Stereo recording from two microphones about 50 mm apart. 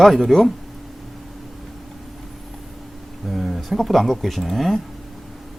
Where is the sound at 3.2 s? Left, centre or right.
Centre.